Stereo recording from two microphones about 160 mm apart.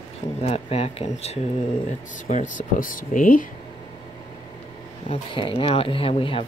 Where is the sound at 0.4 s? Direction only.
40° left (ahead or behind).